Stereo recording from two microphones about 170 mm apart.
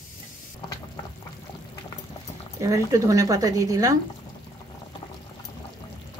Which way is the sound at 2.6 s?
20° right (ahead or behind).